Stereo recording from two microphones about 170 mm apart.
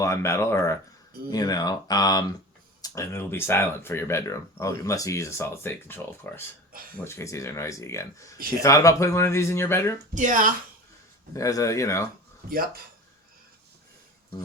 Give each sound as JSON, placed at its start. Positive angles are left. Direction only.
{"t": 0.0, "sound": "speech", "side_deg": 15}
{"t": 10.2, "sound": "speech", "side_deg": -50}
{"t": 11.3, "sound": "speech", "side_deg": 20}